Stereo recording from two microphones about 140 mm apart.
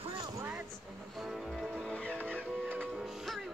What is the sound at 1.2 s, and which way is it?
Music, centre (ahead or behind).